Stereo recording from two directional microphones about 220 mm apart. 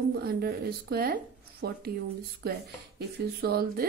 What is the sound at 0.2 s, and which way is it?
Speech, 45° right (ahead or behind).